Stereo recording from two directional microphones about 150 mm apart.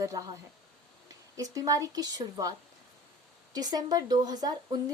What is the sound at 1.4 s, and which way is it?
A woman's voice, 25° right (ahead or behind).